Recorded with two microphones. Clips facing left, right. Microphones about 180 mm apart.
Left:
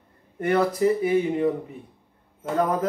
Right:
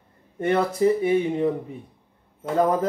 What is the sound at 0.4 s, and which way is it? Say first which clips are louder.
Speech: even; 25° right (ahead or behind).